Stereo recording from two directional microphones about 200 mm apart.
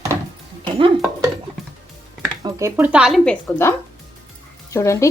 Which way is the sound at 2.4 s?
10° right (ahead or behind).